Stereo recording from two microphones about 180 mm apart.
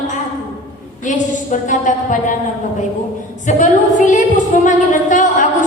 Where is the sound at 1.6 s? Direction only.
45° left (ahead or behind).